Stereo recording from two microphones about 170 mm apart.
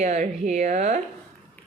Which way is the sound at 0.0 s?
45° right (ahead or behind).